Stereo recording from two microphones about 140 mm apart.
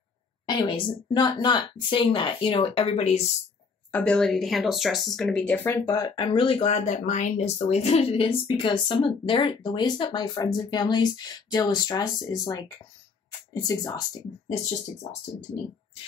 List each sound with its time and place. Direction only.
0.5 s speech: 35° left (ahead or behind)
3.9 s speech: 5° left (ahead or behind)
5.9 s speech: 25° left (ahead or behind)
6.1 s speech: 40° left (ahead or behind)